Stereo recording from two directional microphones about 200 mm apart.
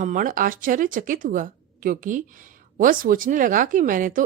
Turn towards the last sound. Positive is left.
turn(degrees=-40)  # may be behind; listen again after turning